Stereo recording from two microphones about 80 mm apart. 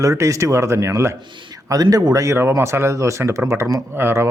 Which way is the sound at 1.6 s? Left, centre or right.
Right.